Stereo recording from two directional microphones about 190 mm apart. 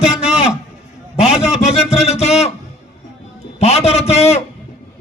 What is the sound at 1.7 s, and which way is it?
Music, 35° left (ahead or behind).